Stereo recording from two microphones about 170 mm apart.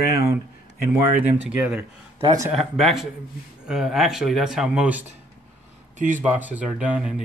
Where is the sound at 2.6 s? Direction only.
Centre (ahead or behind).